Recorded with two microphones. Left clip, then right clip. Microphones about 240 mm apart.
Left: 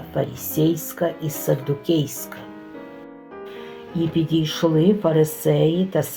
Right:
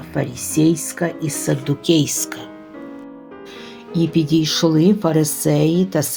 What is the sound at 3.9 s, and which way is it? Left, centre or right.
Speech, right.